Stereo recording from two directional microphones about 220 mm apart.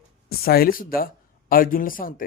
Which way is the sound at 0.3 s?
45° left (ahead or behind).